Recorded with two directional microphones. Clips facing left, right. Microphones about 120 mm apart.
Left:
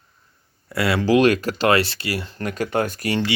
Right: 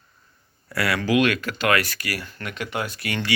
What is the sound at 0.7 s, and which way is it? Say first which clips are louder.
Speech: left 4 dB; 25° left (ahead or behind).